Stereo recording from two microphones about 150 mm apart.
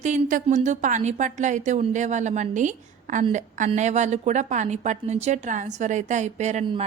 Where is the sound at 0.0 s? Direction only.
55° right (ahead or behind).